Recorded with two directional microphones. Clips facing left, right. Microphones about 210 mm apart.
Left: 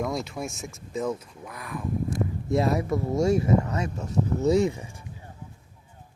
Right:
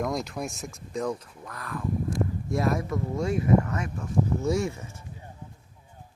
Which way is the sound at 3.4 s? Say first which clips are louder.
Right 1 dB; 25° left (ahead or behind).